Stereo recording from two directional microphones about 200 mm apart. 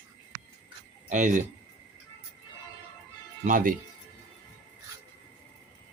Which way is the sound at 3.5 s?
40° right (ahead or behind).